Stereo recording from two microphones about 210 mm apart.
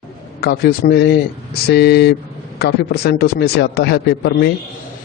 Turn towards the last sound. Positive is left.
turn(degrees=55)  # may be behind; listen again after turning